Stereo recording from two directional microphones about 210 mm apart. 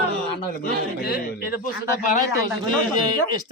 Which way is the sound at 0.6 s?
45° left (ahead or behind).